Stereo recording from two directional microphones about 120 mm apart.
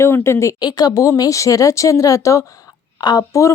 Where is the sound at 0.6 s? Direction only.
35° left (ahead or behind).